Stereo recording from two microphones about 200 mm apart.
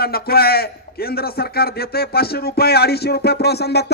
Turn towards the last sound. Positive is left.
turn(degrees=55)  # may be behind; listen again after turning